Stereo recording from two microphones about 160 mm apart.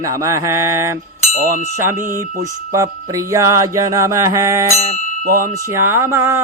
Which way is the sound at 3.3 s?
20° right (ahead or behind).